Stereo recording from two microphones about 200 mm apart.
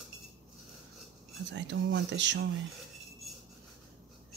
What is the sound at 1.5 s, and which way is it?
Speech, 65° right (ahead or behind).